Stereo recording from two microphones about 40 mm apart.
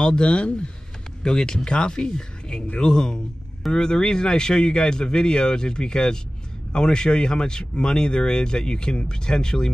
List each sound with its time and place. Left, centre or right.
0.0 s speech: left